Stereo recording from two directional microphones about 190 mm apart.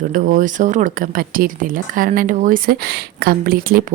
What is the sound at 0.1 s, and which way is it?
Speech, 45° right (ahead or behind).